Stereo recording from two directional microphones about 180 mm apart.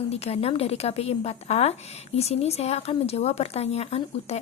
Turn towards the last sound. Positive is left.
turn(degrees=35)  # may be behind; listen again after turning